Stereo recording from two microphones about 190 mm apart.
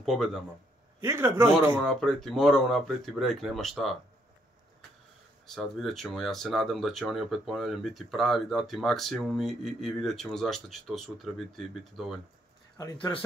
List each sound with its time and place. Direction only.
0.0 s speech: centre (ahead or behind)
1.0 s speech: 15° right (ahead or behind)
1.9 s speech: centre (ahead or behind)
5.5 s speech: centre (ahead or behind)
12.9 s speech: 30° left (ahead or behind)